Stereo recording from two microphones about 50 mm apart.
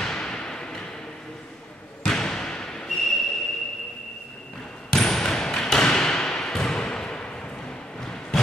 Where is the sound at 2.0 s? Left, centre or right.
Centre.